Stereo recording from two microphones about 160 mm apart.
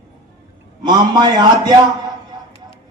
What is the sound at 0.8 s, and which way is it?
Speech, 25° right (ahead or behind).